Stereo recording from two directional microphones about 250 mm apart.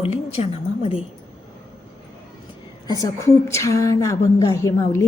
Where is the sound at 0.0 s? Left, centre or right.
Left.